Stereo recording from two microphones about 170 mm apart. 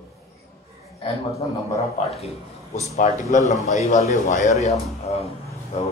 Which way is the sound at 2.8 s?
45° left (ahead or behind).